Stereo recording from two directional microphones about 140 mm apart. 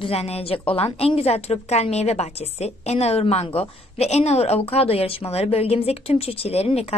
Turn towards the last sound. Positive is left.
turn(degrees=45)  # may be behind; listen again after turning